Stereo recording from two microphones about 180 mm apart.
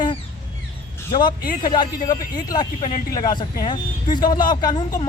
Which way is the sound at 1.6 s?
25° left (ahead or behind).